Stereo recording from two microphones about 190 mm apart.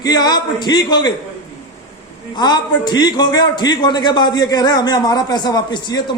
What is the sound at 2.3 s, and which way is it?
A man's voice, 20° left (ahead or behind).